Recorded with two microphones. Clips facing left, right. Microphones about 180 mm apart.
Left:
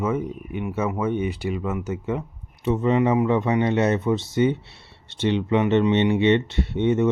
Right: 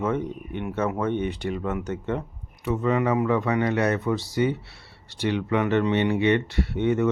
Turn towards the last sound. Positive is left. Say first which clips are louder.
# left 2 dB
turn(degrees=20)  # may be behind; listen again after turning